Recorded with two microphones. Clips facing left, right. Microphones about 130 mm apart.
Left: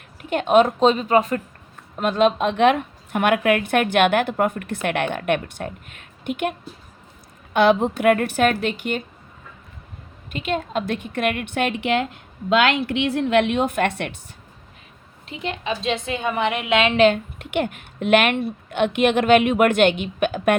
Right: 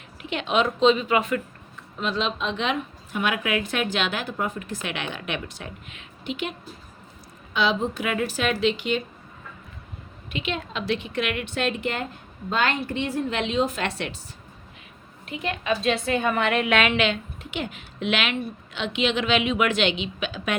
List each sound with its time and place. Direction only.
0.2 s a woman's voice: 50° left (ahead or behind)
2.0 s a woman's voice: 55° left (ahead or behind)
7.5 s a woman's voice: 55° left (ahead or behind)
10.2 s a woman's voice: 45° left (ahead or behind)
15.3 s a woman's voice: 30° left (ahead or behind)
16.9 s a woman's voice: 40° left (ahead or behind)
17.3 s a woman's voice: 60° left (ahead or behind)